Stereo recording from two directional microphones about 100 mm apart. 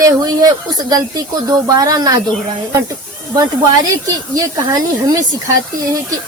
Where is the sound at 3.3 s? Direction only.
40° right (ahead or behind).